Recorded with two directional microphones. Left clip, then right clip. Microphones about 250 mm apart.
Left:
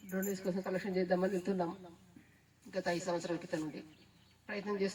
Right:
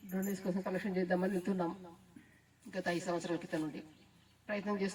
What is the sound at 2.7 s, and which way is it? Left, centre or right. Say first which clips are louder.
A man's voice: left 1 dB; right.